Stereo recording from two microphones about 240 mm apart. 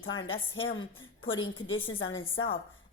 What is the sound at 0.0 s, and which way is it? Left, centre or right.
A woman's voice, left.